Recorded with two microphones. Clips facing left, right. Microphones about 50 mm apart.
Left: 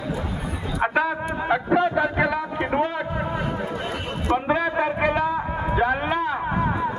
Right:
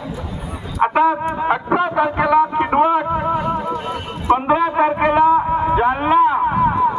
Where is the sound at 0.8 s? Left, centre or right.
Right.